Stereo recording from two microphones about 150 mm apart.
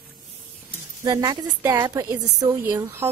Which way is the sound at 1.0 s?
25° right (ahead or behind).